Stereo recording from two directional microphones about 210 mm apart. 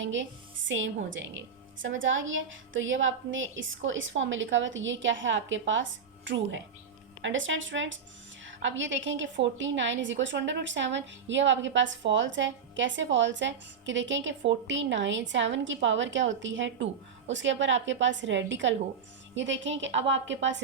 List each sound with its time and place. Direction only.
0.0 s a woman's voice: 60° right (ahead or behind)